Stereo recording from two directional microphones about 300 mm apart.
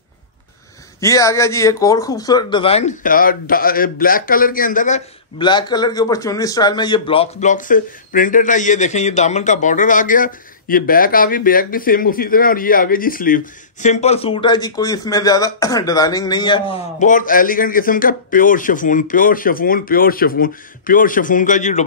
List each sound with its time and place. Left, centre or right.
1.0 s speech: centre